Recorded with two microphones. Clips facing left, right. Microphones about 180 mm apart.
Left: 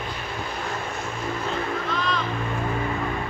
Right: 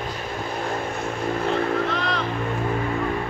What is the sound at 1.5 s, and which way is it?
Vehicle, 65° right (ahead or behind).